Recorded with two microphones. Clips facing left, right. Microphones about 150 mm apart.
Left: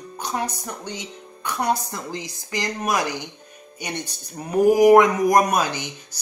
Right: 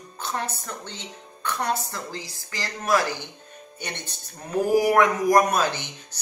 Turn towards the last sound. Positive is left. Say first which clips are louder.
# left 4 dB
turn(degrees=10)  # may be behind; listen again after turning